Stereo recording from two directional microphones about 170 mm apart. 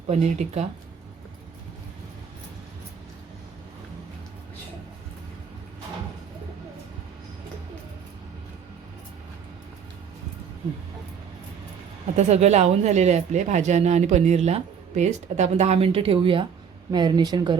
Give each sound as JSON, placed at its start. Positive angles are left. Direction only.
{"t": 0.1, "sound": "speech", "side_deg": -40}
{"t": 12.1, "sound": "a woman's voice", "side_deg": -40}